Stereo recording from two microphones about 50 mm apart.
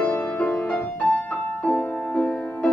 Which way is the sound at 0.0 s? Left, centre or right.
Left.